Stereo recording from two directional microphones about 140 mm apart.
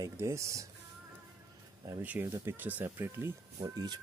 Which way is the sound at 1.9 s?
15° right (ahead or behind).